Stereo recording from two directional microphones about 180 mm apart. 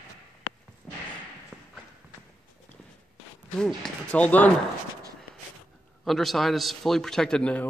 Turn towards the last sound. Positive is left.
turn(degrees=5)  # may be behind; listen again after turning